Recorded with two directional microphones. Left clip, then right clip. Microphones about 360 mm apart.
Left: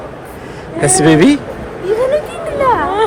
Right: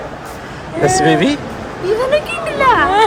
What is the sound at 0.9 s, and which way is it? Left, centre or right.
Speech, centre.